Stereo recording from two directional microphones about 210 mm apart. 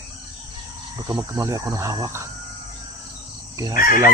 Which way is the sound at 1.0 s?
15° right (ahead or behind).